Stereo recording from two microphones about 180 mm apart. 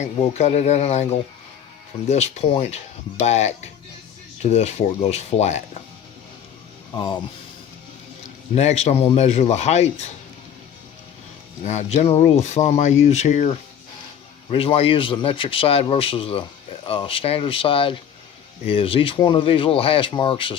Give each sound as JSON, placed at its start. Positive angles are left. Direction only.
{"t": 0.0, "sound": "a man's voice", "side_deg": 35}
{"t": 8.5, "sound": "a man's voice", "side_deg": 35}
{"t": 11.6, "sound": "a man's voice", "side_deg": 40}